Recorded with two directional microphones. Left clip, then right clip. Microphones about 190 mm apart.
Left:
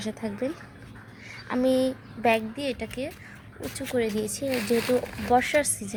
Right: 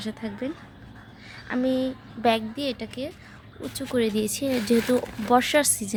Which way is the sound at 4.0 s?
30° right (ahead or behind).